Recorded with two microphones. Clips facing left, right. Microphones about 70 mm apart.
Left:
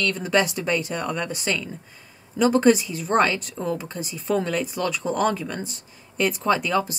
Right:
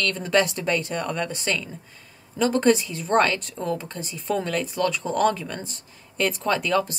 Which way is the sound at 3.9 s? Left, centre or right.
Centre.